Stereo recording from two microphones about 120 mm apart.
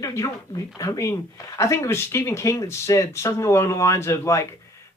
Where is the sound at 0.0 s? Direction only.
25° left (ahead or behind).